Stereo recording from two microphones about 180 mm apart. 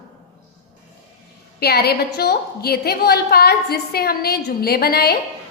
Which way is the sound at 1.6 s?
60° left (ahead or behind).